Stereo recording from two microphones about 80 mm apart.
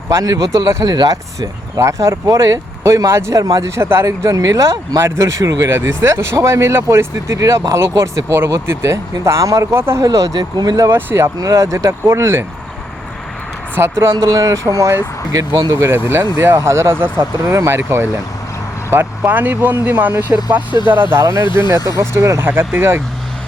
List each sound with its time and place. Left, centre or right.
0.1 s speech: right
3.4 s speech: right
3.8 s speech: right
5.6 s speech: right
10.1 s speech: right
10.9 s speech: right
11.3 s speech: right
13.7 s speech: right
14.3 s speech: right
15.7 s speech: right
21.8 s speech: right